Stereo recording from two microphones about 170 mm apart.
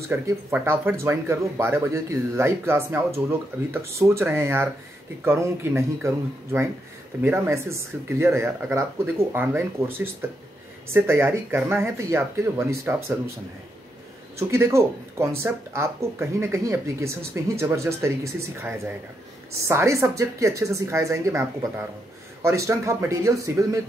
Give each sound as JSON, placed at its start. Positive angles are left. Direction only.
{"t": 0.1, "sound": "speech", "side_deg": -15}
{"t": 14.5, "sound": "speech", "side_deg": -15}